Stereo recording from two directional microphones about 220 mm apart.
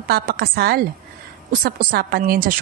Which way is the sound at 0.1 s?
45° right (ahead or behind).